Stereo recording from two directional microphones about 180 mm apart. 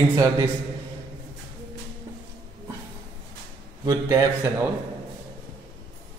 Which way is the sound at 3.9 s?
15° right (ahead or behind).